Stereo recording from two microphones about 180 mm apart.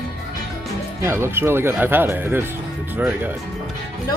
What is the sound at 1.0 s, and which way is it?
Speech, 15° right (ahead or behind).